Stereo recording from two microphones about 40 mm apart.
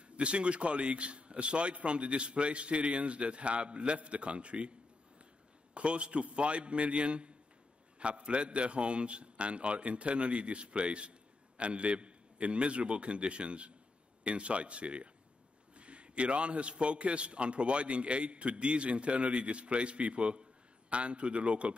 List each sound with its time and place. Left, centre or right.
0.0 s a man's voice: right
5.8 s a man's voice: right